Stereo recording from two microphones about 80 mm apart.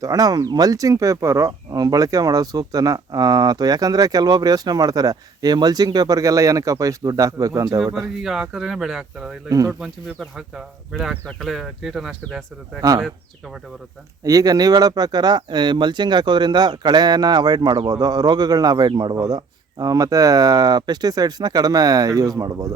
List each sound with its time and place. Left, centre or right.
0.0 s speech: right
1.7 s speech: right
8.2 s speech: centre
9.5 s speech: right
10.3 s speech: centre
14.3 s speech: right
19.2 s speech: right